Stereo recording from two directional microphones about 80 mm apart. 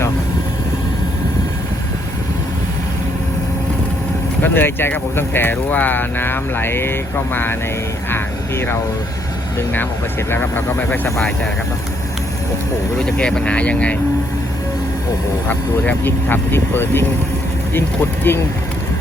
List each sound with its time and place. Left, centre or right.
4.4 s speech: left
10.2 s speech: left
13.0 s speech: centre
15.4 s speech: left